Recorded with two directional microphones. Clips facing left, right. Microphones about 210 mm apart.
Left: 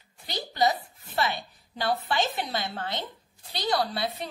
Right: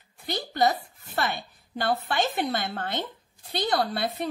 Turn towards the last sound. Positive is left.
turn(degrees=-55)  # may be behind; listen again after turning